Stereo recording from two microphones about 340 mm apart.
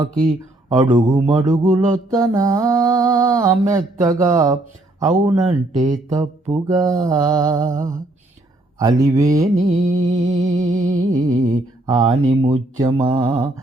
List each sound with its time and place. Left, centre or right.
0.7 s speech: centre
1.6 s music: right
2.1 s speech: centre
9.6 s music: right
9.8 s speech: centre
10.7 s music: right
11.9 s speech: centre